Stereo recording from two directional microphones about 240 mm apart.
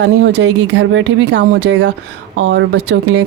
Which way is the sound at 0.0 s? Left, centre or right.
Right.